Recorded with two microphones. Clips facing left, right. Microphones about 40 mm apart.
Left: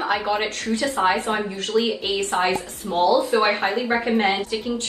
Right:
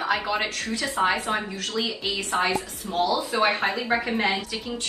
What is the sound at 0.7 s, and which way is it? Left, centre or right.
A woman's voice, left.